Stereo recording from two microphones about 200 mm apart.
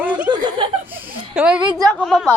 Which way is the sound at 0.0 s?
5° right (ahead or behind).